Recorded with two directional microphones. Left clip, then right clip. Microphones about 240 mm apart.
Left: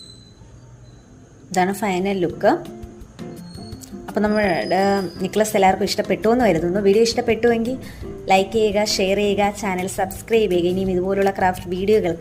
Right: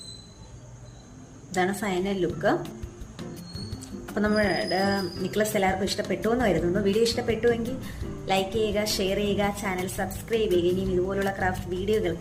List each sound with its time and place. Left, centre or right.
1.5 s a woman's voice: left
3.2 s music: centre
3.8 s music: left
4.7 s a woman's voice: left